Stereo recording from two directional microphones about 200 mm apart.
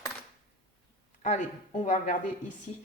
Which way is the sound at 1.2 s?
40° left (ahead or behind).